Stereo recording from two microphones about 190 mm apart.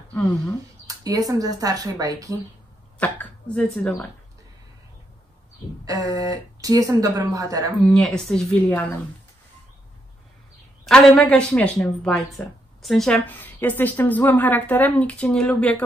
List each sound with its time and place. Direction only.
0.8 s speech: 20° right (ahead or behind)
3.0 s speech: 5° left (ahead or behind)
5.9 s speech: 15° right (ahead or behind)
7.8 s a woman's voice: 5° left (ahead or behind)
10.9 s a woman's voice: 5° left (ahead or behind)